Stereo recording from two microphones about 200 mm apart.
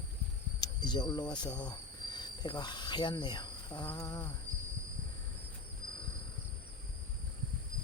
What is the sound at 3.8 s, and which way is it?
Speech, 20° left (ahead or behind).